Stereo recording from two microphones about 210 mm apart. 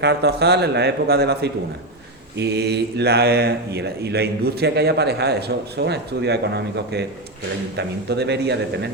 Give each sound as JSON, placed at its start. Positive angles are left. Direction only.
{"t": 0.0, "sound": "speech", "side_deg": -50}